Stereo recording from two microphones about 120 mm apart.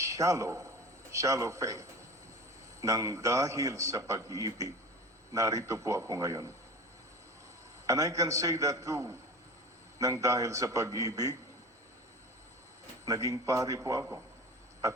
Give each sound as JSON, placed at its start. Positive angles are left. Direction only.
{"t": 0.0, "sound": "a man's voice", "side_deg": -25}
{"t": 7.9, "sound": "a man's voice", "side_deg": -25}
{"t": 13.1, "sound": "a man's voice", "side_deg": -30}